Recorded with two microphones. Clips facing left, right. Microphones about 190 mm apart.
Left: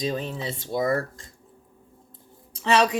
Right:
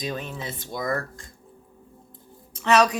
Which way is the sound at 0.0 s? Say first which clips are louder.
Left 3 dB; 30° left (ahead or behind).